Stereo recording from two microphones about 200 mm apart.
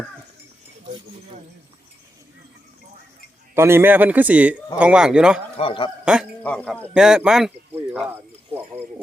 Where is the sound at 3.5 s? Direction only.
10° right (ahead or behind).